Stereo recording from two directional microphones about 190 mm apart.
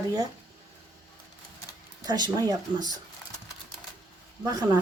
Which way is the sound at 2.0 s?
20° right (ahead or behind).